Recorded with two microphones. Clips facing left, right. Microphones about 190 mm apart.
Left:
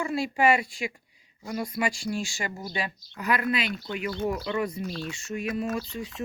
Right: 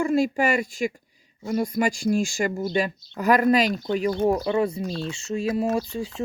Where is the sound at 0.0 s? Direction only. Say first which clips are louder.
Right 4 dB; 45° right (ahead or behind).